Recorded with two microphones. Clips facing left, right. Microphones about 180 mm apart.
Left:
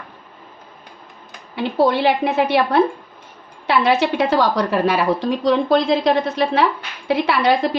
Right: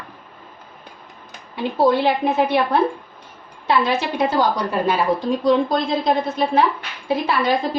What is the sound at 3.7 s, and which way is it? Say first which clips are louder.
A woman's voice: left 3 dB; 75° left (ahead or behind).